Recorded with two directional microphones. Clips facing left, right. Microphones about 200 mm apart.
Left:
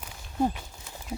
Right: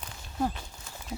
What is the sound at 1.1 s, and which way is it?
Clip-clop, centre (ahead or behind).